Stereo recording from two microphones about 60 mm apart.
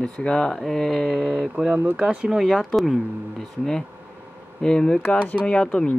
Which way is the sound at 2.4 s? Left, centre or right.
Centre.